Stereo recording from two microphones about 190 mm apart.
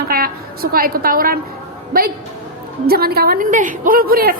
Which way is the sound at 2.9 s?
55° right (ahead or behind).